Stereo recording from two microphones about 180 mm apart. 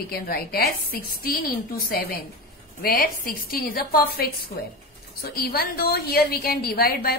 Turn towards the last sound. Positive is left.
turn(degrees=55)  # may be behind; listen again after turning